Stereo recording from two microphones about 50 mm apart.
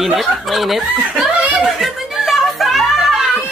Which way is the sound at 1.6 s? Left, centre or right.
Centre.